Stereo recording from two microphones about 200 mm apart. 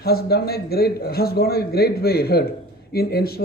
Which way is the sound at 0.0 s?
50° left (ahead or behind).